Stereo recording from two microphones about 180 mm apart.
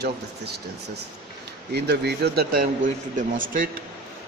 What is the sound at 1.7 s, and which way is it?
Speech, 65° right (ahead or behind).